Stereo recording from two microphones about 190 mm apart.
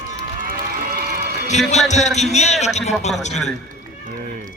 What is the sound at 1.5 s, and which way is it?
A man's voice, 35° left (ahead or behind).